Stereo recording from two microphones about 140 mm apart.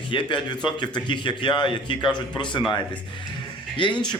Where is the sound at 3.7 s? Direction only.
35° left (ahead or behind).